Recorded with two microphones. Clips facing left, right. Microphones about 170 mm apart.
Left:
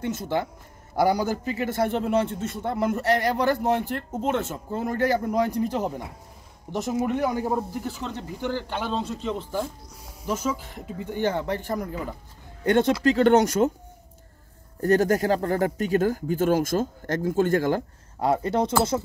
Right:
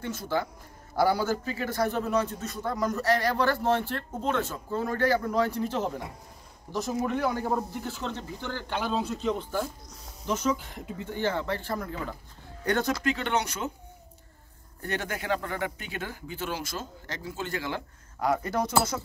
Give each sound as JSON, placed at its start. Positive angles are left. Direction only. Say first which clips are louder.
{"t": 0.0, "sound": "speech", "louder": "left 3 dB", "side_deg": 20}
{"t": 11.1, "sound": "speech", "louder": "left 4 dB", "side_deg": 15}
{"t": 13.0, "sound": "speech", "louder": "left 10 dB", "side_deg": 40}
{"t": 14.8, "sound": "speech", "louder": "left 13 dB", "side_deg": 40}
{"t": 18.2, "sound": "speech", "louder": "left 4 dB", "side_deg": 25}